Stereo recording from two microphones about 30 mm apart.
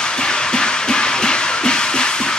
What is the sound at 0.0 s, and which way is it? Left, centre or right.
Music, left.